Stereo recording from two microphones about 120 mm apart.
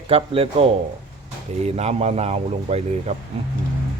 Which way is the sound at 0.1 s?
50° right (ahead or behind).